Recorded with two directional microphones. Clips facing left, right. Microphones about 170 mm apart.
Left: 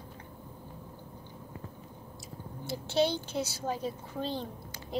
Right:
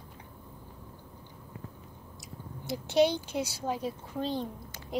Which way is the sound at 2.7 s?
15° right (ahead or behind).